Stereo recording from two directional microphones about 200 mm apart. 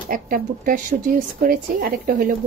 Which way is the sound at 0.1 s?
45° right (ahead or behind).